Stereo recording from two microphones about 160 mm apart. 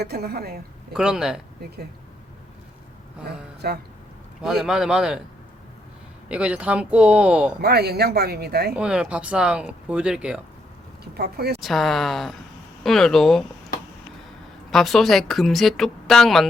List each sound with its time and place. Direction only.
0.0 s speech: 80° right
0.9 s speech: 5° right (ahead or behind)
3.6 s speech: 85° right
4.4 s speech: 5° right (ahead or behind)
6.2 s speech: 5° right (ahead or behind)
7.6 s speech: 85° right
8.7 s speech: 5° right (ahead or behind)
11.0 s speech: 85° right
11.6 s speech: centre (ahead or behind)
14.7 s speech: centre (ahead or behind)